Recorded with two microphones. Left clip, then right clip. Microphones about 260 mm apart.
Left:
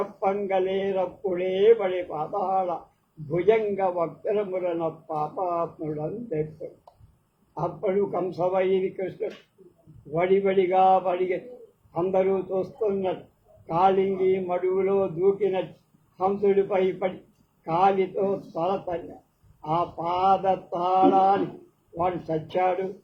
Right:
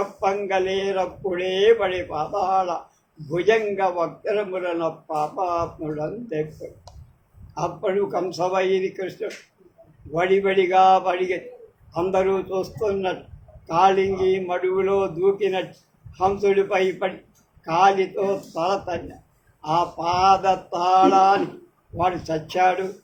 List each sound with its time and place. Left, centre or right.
0.0 s mantra: right
0.9 s speech: right
1.5 s mantra: right
7.5 s mantra: right
13.7 s mantra: right
21.9 s speech: right